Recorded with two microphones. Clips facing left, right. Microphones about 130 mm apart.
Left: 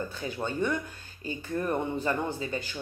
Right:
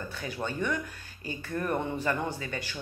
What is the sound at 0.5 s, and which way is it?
Speech, 30° left (ahead or behind).